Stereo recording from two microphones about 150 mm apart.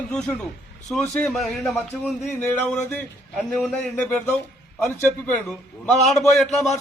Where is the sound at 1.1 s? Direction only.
Centre (ahead or behind).